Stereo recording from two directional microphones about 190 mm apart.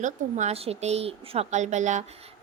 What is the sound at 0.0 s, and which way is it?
A woman's voice, 40° right (ahead or behind).